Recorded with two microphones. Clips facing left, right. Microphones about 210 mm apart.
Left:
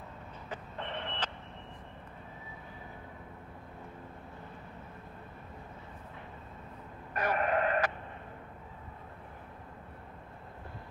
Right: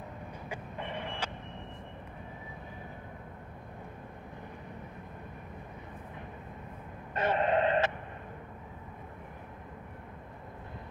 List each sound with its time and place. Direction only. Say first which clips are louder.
0.5 s vehicle: even; 10° right (ahead or behind)
7.2 s radio: right 3 dB; 25° right (ahead or behind)